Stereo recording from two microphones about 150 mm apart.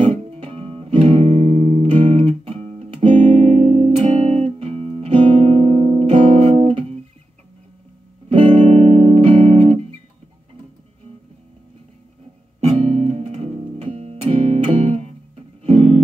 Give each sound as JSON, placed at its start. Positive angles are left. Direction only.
{"t": 0.0, "sound": "music", "side_deg": -45}
{"t": 8.3, "sound": "music", "side_deg": -40}
{"t": 12.5, "sound": "music", "side_deg": -40}